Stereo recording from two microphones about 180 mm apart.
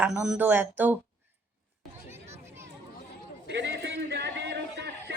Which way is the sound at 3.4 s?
70° right (ahead or behind).